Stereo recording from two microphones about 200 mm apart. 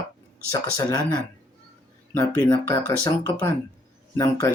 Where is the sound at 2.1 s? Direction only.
10° left (ahead or behind).